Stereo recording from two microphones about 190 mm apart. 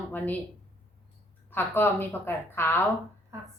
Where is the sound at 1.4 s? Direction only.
10° left (ahead or behind).